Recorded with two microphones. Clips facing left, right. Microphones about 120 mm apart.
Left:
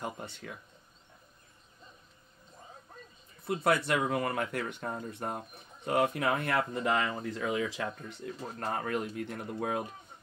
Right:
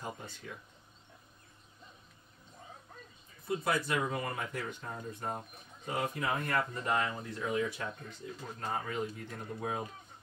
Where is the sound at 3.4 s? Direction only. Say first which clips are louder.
Left 4 dB; 70° left (ahead or behind).